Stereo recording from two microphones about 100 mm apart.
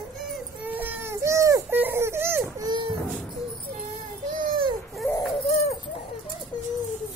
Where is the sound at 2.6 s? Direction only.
45° right (ahead or behind).